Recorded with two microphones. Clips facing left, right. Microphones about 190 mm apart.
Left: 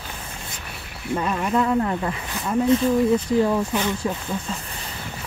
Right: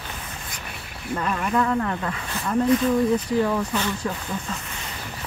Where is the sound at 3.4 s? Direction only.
15° left (ahead or behind).